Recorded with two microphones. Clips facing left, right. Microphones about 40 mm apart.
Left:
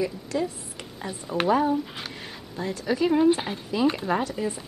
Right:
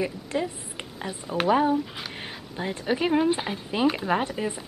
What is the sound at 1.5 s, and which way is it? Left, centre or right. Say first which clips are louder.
Speech: right 1 dB; right.